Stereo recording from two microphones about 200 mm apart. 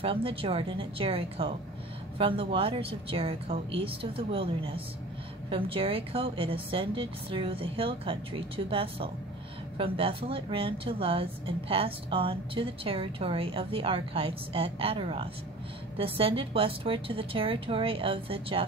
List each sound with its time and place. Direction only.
0.0 s speech: 25° right (ahead or behind)